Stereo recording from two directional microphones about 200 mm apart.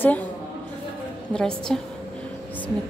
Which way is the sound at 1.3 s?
5° left (ahead or behind).